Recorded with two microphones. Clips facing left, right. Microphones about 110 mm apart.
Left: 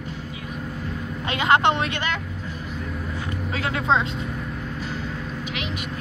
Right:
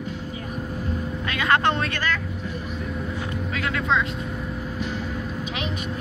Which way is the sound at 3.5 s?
30° left (ahead or behind).